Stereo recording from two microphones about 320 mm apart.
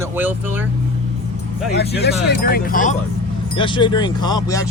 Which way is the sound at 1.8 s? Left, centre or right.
Left.